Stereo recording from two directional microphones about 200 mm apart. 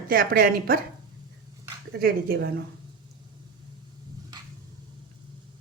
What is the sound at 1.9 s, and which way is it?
Speech, 50° right (ahead or behind).